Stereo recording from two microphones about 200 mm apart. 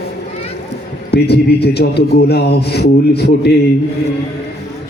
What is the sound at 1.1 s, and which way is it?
Mantra, 55° left (ahead or behind).